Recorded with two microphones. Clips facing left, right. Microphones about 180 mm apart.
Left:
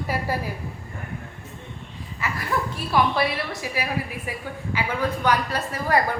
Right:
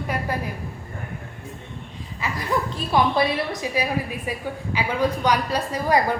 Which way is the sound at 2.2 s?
15° right (ahead or behind).